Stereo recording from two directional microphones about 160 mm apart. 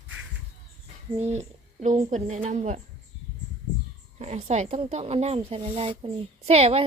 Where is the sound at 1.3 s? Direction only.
45° right (ahead or behind).